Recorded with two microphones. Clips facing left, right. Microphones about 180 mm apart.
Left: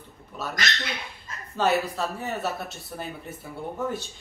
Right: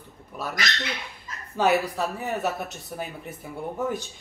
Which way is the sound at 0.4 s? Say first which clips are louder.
Right 1 dB; 15° right (ahead or behind).